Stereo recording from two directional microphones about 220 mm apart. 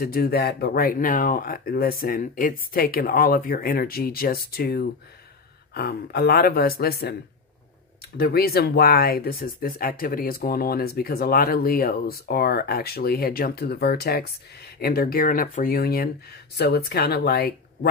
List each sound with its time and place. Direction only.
0.0 s speech: 45° left (ahead or behind)
8.2 s speech: 45° left (ahead or behind)